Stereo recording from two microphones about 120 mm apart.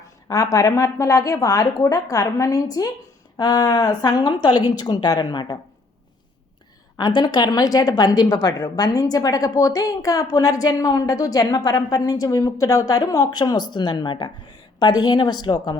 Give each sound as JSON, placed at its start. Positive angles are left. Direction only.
{"t": 0.3, "sound": "a woman's voice", "side_deg": 30}
{"t": 7.0, "sound": "a woman's voice", "side_deg": 40}